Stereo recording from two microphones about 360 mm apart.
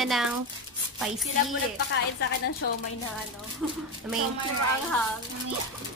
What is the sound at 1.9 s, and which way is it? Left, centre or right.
Speech, left.